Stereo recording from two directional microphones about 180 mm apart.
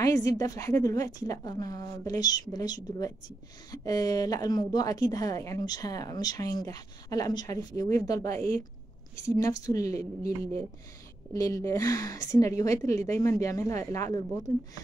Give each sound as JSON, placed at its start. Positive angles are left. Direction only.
{"t": 0.0, "sound": "a woman's voice", "side_deg": 20}